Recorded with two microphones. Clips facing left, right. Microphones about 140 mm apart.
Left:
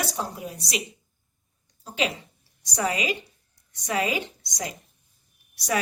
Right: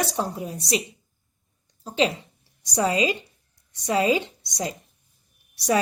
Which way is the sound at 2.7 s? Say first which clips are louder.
Right 4 dB; 30° right (ahead or behind).